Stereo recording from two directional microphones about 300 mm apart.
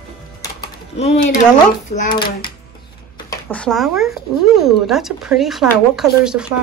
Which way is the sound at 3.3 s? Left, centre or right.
Centre.